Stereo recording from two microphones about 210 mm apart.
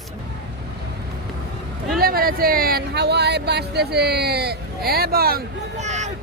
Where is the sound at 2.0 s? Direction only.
45° right (ahead or behind).